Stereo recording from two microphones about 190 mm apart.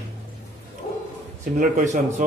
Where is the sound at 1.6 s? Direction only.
40° right (ahead or behind).